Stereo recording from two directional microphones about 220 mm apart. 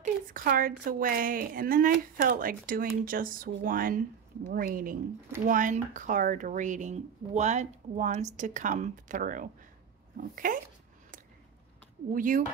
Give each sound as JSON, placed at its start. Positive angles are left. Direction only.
{"t": 0.0, "sound": "a woman's voice", "side_deg": -40}
{"t": 12.1, "sound": "a woman's voice", "side_deg": -40}